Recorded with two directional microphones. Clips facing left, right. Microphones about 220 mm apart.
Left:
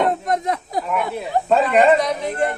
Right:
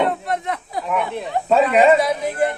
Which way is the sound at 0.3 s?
40° left (ahead or behind).